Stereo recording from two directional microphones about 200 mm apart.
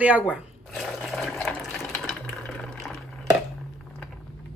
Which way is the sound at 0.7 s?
5° left (ahead or behind).